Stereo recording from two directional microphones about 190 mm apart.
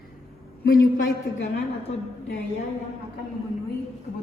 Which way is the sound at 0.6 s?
50° left (ahead or behind).